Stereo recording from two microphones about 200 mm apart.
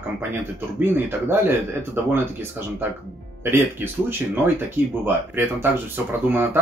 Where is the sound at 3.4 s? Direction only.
10° right (ahead or behind).